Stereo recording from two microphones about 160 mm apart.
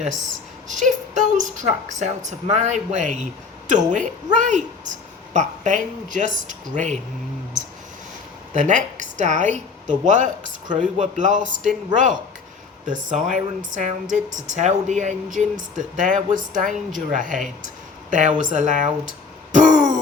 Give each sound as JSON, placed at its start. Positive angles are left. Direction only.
{"t": 0.7, "sound": "a woman's voice", "side_deg": -50}
{"t": 8.5, "sound": "speech", "side_deg": -50}
{"t": 12.8, "sound": "a woman's voice", "side_deg": -55}